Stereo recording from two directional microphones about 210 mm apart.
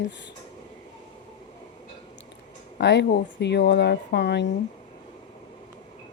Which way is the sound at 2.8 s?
55° left (ahead or behind).